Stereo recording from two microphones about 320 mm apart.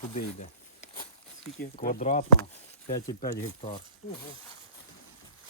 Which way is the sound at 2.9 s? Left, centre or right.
Centre.